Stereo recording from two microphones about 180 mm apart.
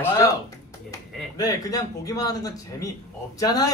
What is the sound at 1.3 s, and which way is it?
A man's voice, 20° left (ahead or behind).